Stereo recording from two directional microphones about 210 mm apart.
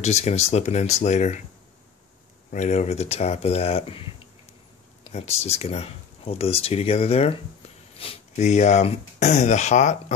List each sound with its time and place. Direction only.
0.0 s speech: 30° left (ahead or behind)
2.5 s speech: 35° left (ahead or behind)